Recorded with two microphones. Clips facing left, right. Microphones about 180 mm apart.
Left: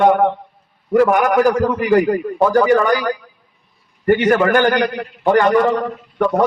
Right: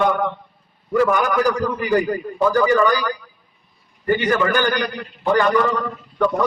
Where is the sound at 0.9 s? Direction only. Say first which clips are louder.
Left 4 dB; 65° left (ahead or behind).